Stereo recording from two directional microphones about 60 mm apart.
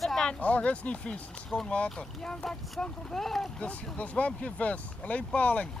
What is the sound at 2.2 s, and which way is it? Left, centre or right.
Speech, centre.